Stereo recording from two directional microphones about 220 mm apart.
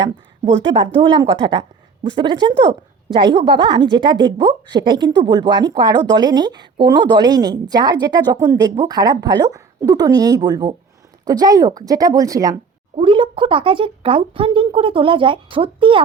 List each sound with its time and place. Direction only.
1.0 s a woman's voice: 20° right (ahead or behind)